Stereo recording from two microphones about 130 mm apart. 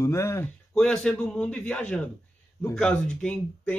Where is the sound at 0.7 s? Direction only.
5° left (ahead or behind).